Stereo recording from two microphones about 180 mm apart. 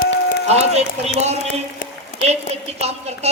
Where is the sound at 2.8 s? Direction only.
35° right (ahead or behind).